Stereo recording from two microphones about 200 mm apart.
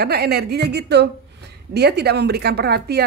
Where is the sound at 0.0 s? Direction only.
50° right (ahead or behind).